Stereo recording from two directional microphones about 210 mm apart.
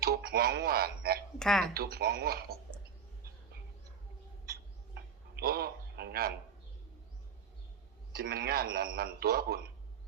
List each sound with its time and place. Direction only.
0.0 s speech: 45° right (ahead or behind)
1.4 s speech: centre (ahead or behind)
1.6 s speech: 45° right (ahead or behind)
5.3 s a man's voice: 45° right (ahead or behind)
8.1 s speech: 45° right (ahead or behind)